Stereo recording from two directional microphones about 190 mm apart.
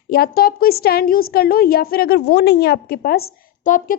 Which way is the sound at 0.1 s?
55° left (ahead or behind).